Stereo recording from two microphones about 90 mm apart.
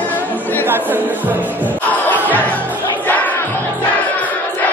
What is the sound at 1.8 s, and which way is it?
Crowd, 20° left (ahead or behind).